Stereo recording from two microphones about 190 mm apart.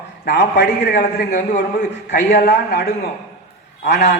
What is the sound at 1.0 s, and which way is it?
Speech, 40° left (ahead or behind).